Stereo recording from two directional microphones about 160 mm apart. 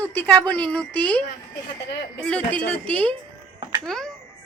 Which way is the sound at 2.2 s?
10° left (ahead or behind).